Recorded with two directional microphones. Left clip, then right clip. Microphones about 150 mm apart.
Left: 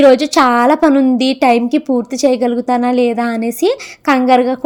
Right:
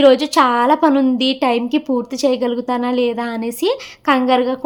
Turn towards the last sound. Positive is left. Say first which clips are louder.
# left 4 dB
turn(degrees=30)  # may be behind; listen again after turning